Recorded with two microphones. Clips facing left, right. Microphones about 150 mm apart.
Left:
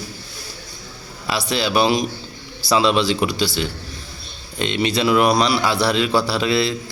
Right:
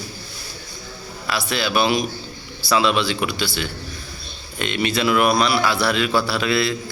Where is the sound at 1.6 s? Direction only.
30° left (ahead or behind).